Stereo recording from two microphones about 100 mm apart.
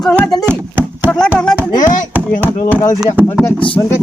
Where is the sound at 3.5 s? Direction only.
60° left (ahead or behind).